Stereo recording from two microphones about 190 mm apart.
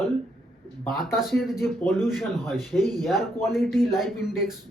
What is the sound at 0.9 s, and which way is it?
Speech, centre (ahead or behind).